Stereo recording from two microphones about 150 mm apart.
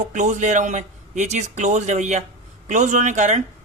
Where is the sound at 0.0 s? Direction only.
50° right (ahead or behind).